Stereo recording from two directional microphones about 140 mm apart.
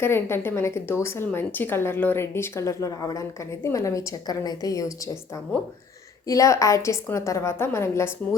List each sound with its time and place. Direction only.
0.0 s a woman's voice: 15° left (ahead or behind)
6.2 s a woman's voice: 25° left (ahead or behind)